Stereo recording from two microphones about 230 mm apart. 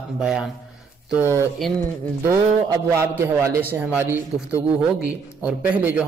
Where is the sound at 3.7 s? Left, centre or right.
Centre.